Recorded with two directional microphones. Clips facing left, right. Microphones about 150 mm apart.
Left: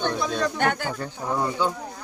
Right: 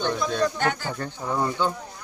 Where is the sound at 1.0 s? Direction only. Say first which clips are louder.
Right 1 dB; 5° left (ahead or behind).